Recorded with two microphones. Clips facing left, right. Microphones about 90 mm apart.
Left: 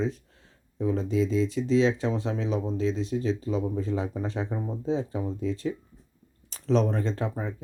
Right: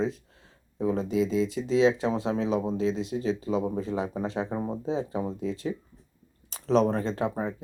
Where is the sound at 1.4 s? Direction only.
35° left (ahead or behind).